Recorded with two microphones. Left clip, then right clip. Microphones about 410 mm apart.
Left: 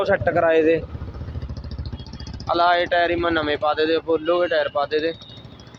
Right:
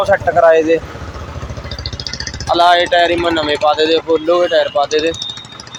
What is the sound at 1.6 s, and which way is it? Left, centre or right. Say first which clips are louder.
Vehicle: right 15 dB; left.